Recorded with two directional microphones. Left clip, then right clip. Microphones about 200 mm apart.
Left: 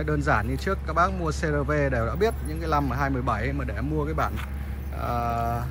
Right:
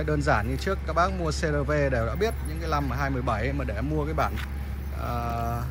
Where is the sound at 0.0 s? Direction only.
5° right (ahead or behind).